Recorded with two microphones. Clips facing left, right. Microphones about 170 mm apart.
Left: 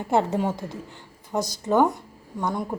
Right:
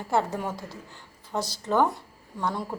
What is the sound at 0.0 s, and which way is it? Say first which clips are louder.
A woman's voice: left 4 dB; 20° left (ahead or behind).